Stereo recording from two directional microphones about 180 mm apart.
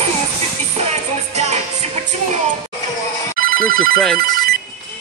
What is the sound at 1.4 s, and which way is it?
Music, 40° right (ahead or behind).